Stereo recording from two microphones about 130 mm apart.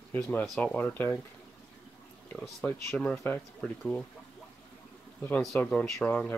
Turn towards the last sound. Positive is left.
turn(degrees=10)  # may be behind; listen again after turning